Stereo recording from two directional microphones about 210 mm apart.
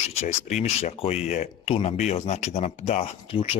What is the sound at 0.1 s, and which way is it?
Speech, 30° left (ahead or behind).